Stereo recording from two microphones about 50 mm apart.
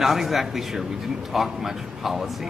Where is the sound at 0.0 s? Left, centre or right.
Centre.